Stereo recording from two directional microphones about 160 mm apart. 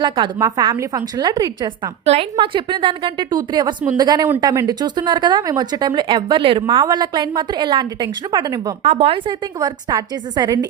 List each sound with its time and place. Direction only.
0.0 s speech: 25° right (ahead or behind)
8.8 s speech: 40° right (ahead or behind)